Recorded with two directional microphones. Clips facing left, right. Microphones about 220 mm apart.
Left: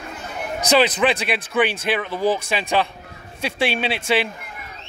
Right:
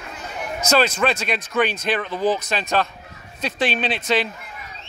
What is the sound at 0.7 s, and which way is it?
Speech, 15° left (ahead or behind).